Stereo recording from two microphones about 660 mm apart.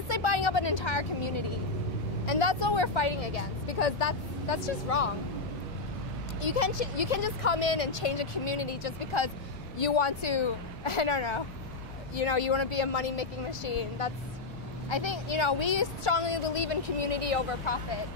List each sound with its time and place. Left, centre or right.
0.1 s vehicle: left
2.2 s a woman's voice: left
3.2 s speech: left
6.4 s a woman's voice: left